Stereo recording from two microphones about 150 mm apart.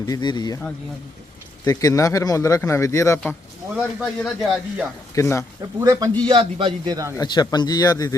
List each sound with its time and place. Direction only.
0.0 s speech: 30° left (ahead or behind)
1.6 s speech: 20° left (ahead or behind)
3.8 s speech: centre (ahead or behind)
5.1 s speech: 20° left (ahead or behind)
5.8 s speech: 25° right (ahead or behind)
6.2 s a man's voice: 35° right (ahead or behind)
7.2 s speech: 30° left (ahead or behind)